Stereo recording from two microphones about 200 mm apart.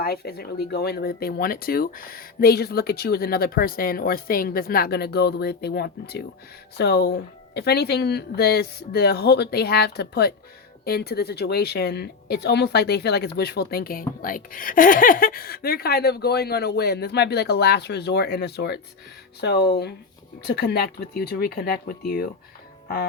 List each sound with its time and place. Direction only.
0.0 s speech: 50° left (ahead or behind)